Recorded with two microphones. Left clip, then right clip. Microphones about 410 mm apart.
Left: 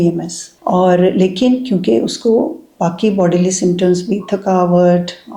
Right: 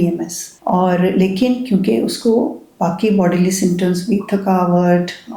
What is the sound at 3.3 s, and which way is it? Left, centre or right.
Speech, left.